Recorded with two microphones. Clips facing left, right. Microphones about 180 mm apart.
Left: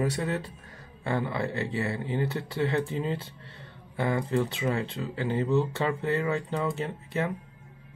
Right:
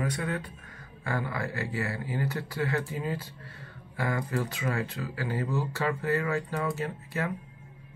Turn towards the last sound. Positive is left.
turn(degrees=20)  # may be behind; listen again after turning